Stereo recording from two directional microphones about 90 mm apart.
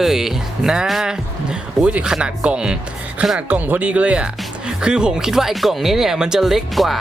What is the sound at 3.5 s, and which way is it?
Speech, 20° right (ahead or behind).